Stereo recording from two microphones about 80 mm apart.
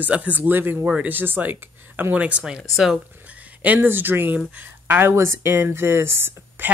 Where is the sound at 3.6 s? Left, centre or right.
Right.